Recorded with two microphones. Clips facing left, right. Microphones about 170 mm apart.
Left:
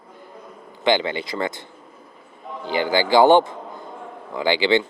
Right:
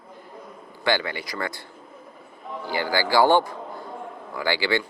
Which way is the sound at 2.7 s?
20° left (ahead or behind).